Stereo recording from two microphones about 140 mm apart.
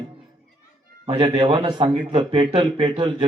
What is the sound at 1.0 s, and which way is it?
A man's voice, 40° right (ahead or behind).